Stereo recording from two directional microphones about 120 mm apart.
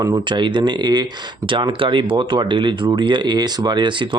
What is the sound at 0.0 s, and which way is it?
Speech, 35° right (ahead or behind).